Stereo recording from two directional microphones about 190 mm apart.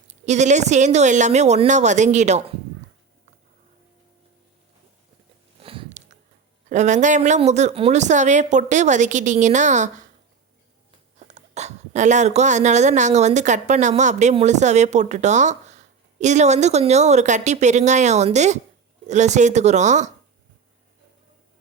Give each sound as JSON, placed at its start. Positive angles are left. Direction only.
{"t": 0.1, "sound": "speech", "side_deg": -40}
{"t": 5.6, "sound": "a sound", "side_deg": -30}
{"t": 6.7, "sound": "speech", "side_deg": -40}
{"t": 11.2, "sound": "speech", "side_deg": -35}